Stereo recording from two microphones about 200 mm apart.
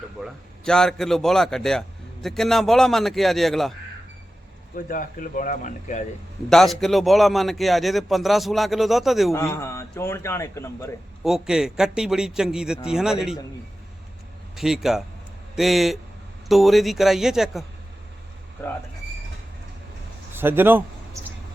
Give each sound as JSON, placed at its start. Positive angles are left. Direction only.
{"t": 0.2, "sound": "a man's voice", "side_deg": 5}
{"t": 4.9, "sound": "speech", "side_deg": 40}
{"t": 6.5, "sound": "a man's voice", "side_deg": 0}
{"t": 9.3, "sound": "a man's voice", "side_deg": 15}
{"t": 11.2, "sound": "a man's voice", "side_deg": 0}
{"t": 14.5, "sound": "a man's voice", "side_deg": 0}
{"t": 18.6, "sound": "a man's voice", "side_deg": 15}
{"t": 20.3, "sound": "speech", "side_deg": -10}